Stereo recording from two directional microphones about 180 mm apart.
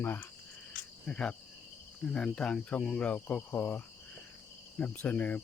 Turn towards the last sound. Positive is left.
turn(degrees=10)  # may be behind; listen again after turning